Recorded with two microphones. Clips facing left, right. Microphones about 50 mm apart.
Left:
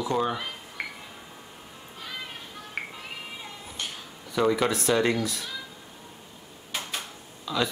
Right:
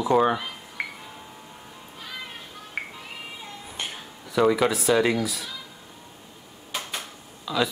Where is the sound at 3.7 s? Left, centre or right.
Right.